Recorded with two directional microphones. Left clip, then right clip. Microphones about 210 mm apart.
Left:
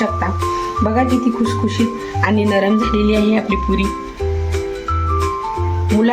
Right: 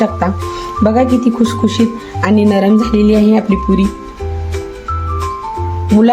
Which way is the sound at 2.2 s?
60° right (ahead or behind).